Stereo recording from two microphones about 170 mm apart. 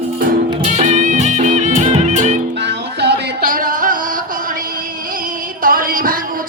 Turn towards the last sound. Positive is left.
turn(degrees=-55)  # may be behind; listen again after turning